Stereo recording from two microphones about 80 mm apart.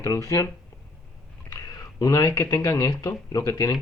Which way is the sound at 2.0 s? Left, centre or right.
Left.